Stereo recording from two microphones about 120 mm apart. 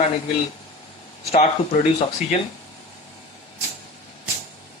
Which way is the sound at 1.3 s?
60° left (ahead or behind).